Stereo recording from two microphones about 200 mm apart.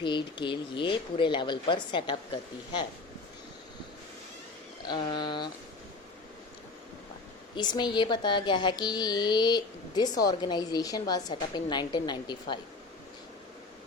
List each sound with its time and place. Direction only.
0.0 s speech: 25° left (ahead or behind)
4.8 s speech: 20° left (ahead or behind)
7.5 s speech: 20° left (ahead or behind)